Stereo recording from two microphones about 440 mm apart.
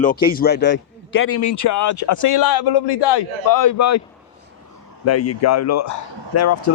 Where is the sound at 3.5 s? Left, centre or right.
Left.